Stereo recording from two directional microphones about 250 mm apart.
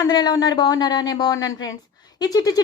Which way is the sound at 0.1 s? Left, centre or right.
Centre.